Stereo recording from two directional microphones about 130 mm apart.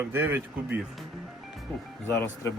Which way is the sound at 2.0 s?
20° left (ahead or behind).